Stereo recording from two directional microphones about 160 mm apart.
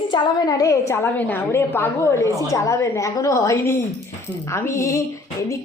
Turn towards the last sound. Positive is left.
turn(degrees=20)  # may be behind; listen again after turning